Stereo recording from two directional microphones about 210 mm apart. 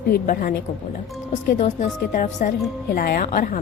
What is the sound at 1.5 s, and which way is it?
A woman's voice, 35° left (ahead or behind).